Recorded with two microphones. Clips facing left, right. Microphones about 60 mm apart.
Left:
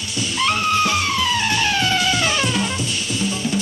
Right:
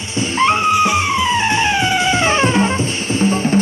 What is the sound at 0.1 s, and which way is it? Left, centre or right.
Music, right.